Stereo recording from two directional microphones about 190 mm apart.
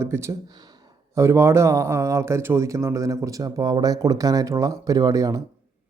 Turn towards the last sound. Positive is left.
turn(degrees=-20)  # may be behind; listen again after turning